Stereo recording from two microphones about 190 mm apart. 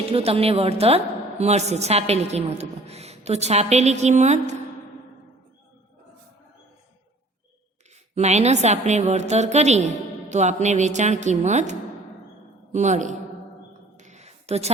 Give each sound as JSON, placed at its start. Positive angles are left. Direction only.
{"t": 0.1, "sound": "a woman's voice", "side_deg": -30}
{"t": 8.1, "sound": "a woman's voice", "side_deg": -35}
{"t": 13.9, "sound": "a sound", "side_deg": -40}